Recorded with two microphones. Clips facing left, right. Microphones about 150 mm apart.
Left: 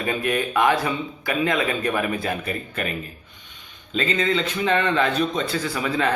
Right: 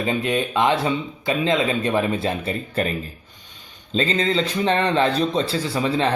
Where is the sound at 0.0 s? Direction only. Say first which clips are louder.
Right 2 dB; 20° right (ahead or behind).